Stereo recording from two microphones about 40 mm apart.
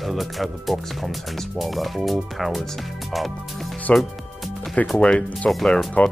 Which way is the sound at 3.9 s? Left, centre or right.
Left.